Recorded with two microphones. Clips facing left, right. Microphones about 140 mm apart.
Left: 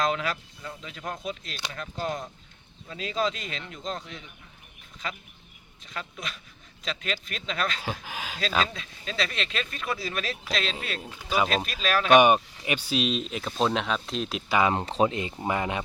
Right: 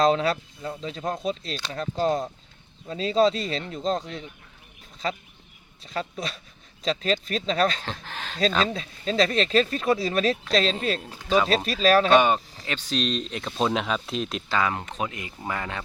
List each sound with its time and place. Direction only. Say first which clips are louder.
0.0 s speech: right 7 dB; 30° right (ahead or behind)
7.8 s speech: left 1 dB; 10° left (ahead or behind)
8.6 s speech: right 7 dB; 35° right (ahead or behind)
12.1 s speech: left 1 dB; 15° left (ahead or behind); by 14.4 s centre (ahead or behind)
14.5 s speech: left 2 dB; 20° left (ahead or behind)
14.8 s speech: left 7 dB; 30° left (ahead or behind)